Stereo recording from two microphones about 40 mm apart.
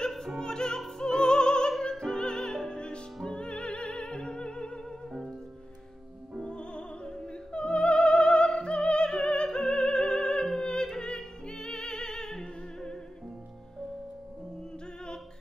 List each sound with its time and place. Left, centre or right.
0.1 s opera: centre
0.4 s opera: centre
0.8 s music: centre
6.4 s music: left
7.2 s opera: left
10.9 s music: centre